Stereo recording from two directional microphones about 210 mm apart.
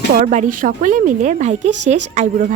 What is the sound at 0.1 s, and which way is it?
Speech, 35° right (ahead or behind).